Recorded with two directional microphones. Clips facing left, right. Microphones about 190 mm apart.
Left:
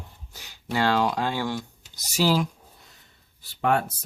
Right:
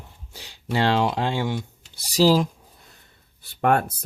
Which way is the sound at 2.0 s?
35° right (ahead or behind).